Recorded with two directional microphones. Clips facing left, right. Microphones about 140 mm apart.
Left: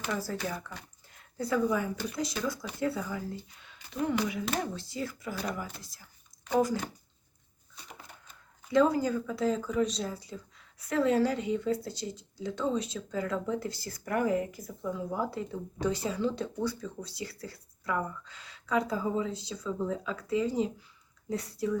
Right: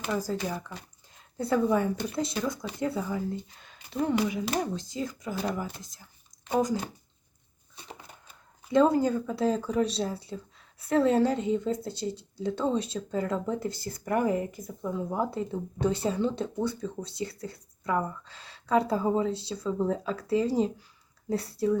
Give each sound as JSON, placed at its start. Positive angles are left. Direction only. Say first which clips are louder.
{"t": 0.2, "sound": "speech", "louder": "right 3 dB", "side_deg": -15}
{"t": 0.7, "sound": "speech", "louder": "right 2 dB", "side_deg": -25}
{"t": 8.7, "sound": "speech", "louder": "right 3 dB", "side_deg": -25}